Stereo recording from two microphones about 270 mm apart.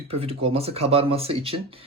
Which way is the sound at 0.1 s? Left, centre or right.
Right.